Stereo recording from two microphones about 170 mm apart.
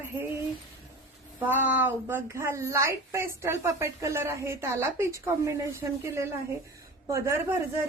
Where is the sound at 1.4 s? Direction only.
10° right (ahead or behind).